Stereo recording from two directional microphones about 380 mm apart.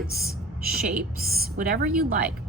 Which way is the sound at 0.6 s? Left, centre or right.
Centre.